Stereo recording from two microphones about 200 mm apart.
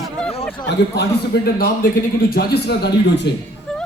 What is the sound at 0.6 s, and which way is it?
A man's voice, 60° left (ahead or behind).